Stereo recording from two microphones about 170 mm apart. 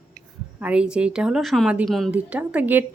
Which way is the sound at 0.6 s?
5° right (ahead or behind).